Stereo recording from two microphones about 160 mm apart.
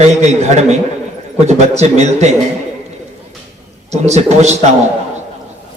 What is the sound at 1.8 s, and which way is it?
Speech, 45° right (ahead or behind).